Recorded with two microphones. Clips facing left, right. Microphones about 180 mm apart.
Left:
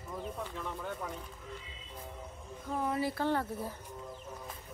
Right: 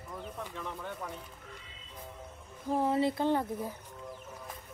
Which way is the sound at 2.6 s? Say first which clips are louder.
Right 5 dB; 30° right (ahead or behind).